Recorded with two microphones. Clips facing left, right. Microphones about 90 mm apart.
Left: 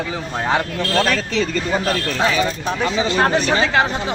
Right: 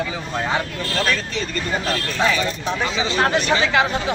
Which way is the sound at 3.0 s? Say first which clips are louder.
Left 4 dB; 45° left (ahead or behind).